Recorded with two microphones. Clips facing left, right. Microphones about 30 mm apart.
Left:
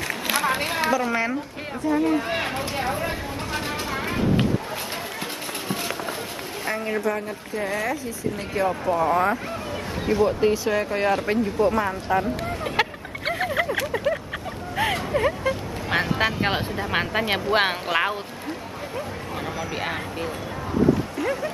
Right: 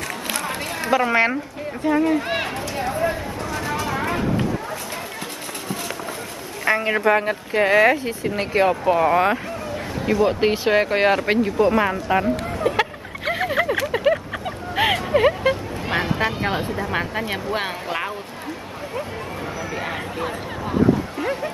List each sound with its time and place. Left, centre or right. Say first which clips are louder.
0.1 s run: left 7 dB; left
0.9 s speech: right 5 dB; right
2.5 s speech: right 1 dB; left
6.6 s speech: right 7 dB; right
12.7 s a sound: right 4 dB; centre
13.9 s a sound: right 5 dB; right
15.9 s a sound: even; centre
16.9 s speech: left 4 dB; left
21.2 s speech: right 1 dB; right